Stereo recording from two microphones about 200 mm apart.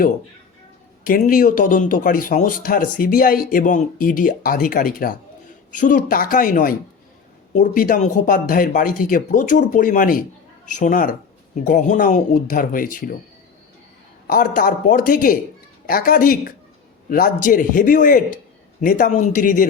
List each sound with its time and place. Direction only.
1.0 s speech: 45° left (ahead or behind)
14.3 s speech: 45° left (ahead or behind)